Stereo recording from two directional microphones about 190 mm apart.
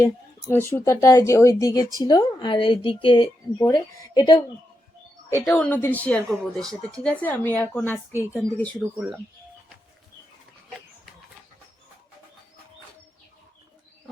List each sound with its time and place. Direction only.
0.0 s a woman's voice: 15° left (ahead or behind)
5.5 s speech: 10° left (ahead or behind)
9.0 s speech: 5° right (ahead or behind)